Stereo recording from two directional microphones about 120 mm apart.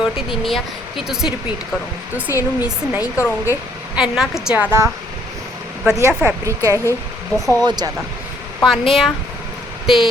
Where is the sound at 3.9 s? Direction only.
5° right (ahead or behind).